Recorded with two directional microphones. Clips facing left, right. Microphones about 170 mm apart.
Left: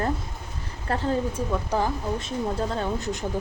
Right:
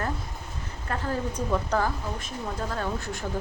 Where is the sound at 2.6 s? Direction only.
25° left (ahead or behind).